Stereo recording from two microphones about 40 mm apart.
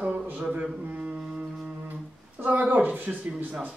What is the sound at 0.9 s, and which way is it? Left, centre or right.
Speech, right.